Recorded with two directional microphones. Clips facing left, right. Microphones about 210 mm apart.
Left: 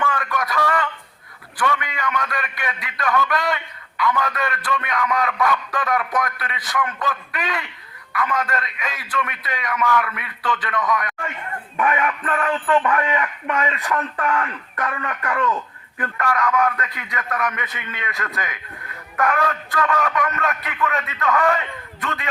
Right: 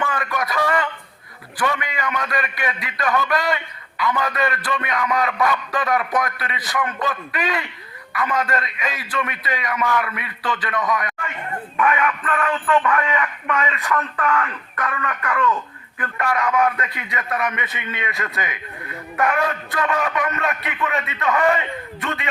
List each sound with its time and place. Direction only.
0.0 s a sound: 5° right (ahead or behind)
1.5 s a man's voice: 5° right (ahead or behind)
11.8 s speech: 30° left (ahead or behind)
16.1 s a man's voice: 10° right (ahead or behind)